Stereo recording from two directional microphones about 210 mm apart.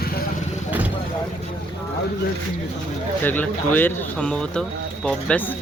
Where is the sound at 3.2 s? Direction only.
10° left (ahead or behind).